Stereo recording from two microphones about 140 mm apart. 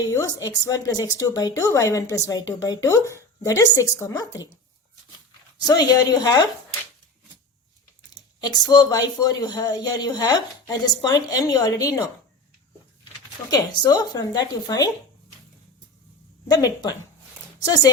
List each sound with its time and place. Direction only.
0.1 s speech: 25° left (ahead or behind)
5.6 s speech: 30° left (ahead or behind)
8.1 s speech: 30° left (ahead or behind)
13.5 s speech: 30° left (ahead or behind)
16.5 s speech: 25° left (ahead or behind)